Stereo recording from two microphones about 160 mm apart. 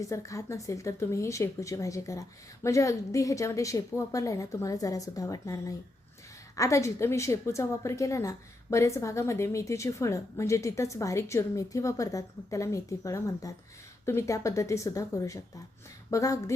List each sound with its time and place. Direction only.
0.0 s a woman's voice: 20° left (ahead or behind)